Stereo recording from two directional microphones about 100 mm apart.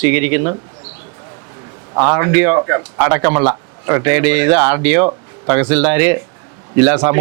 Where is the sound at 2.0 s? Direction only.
25° right (ahead or behind).